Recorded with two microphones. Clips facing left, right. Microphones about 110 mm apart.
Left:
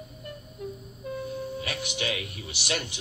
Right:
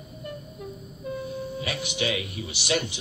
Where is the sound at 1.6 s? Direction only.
50° left (ahead or behind).